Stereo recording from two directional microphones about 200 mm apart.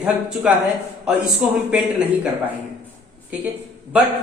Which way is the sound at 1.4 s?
5° right (ahead or behind).